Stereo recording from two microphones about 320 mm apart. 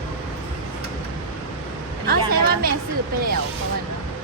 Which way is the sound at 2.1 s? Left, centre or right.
Right.